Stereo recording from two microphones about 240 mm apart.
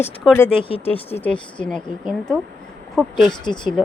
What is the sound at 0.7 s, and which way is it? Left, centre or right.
Speech, left.